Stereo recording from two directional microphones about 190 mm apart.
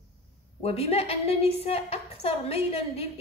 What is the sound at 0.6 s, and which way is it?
A woman's voice, 30° left (ahead or behind).